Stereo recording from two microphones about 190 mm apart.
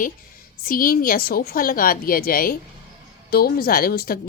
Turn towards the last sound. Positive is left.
turn(degrees=55)  # may be behind; listen again after turning